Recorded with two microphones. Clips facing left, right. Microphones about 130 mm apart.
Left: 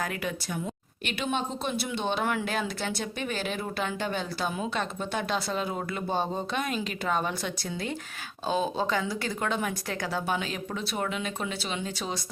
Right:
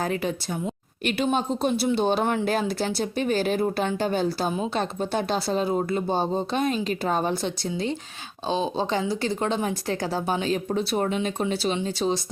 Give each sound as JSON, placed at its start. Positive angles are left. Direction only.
{"t": 0.0, "sound": "speech", "side_deg": -30}